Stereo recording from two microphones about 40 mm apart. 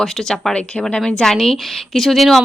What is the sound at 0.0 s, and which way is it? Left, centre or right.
Speech, centre.